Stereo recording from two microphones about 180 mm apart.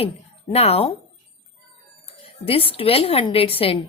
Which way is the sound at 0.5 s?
35° left (ahead or behind).